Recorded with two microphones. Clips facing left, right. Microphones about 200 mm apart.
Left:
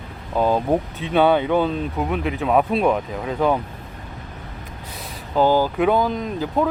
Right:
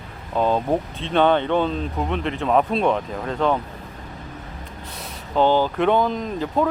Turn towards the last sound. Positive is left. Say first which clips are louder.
# even
turn(degrees=0)  # may be behind; listen again after turning